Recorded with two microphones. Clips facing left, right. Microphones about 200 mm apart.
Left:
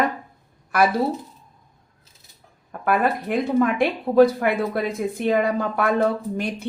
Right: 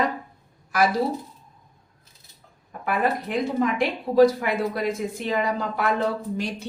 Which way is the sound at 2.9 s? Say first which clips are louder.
Left 3 dB; 55° left (ahead or behind).